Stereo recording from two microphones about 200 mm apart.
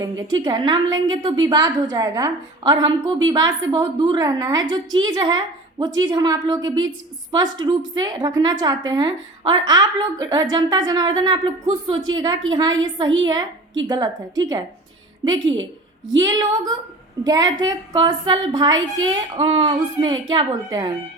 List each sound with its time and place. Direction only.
0.3 s a woman's voice: 20° right (ahead or behind)